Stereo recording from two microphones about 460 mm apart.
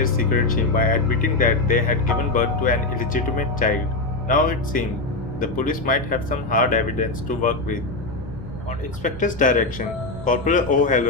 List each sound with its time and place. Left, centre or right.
0.5 s speech: centre
9.0 s speech: centre